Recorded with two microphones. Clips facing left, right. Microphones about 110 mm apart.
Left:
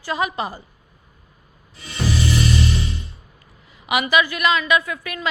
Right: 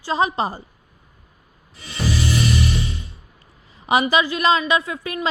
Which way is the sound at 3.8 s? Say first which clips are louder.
Right 1 dB; 30° right (ahead or behind).